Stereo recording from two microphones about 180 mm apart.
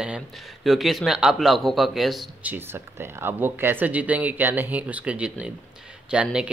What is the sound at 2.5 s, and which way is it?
Speech, 10° right (ahead or behind).